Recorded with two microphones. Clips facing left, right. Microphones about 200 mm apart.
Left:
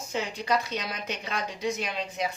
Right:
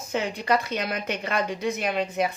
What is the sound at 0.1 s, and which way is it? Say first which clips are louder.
A woman's voice: right 4 dB; 55° right (ahead or behind).